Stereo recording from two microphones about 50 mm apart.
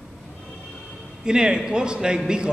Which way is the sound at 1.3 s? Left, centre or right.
Centre.